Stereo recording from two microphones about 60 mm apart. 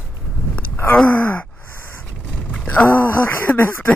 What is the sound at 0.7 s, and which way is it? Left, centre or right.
Gasp, left.